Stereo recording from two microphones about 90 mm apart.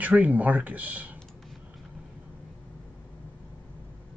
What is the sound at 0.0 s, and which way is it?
Speech, 15° right (ahead or behind).